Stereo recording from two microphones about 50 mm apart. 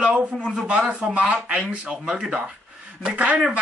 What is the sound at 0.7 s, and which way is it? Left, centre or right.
Speech, right.